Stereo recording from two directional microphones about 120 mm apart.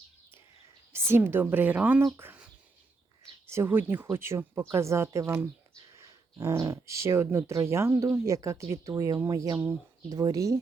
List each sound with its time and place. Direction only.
0.9 s a woman's voice: 20° right (ahead or behind)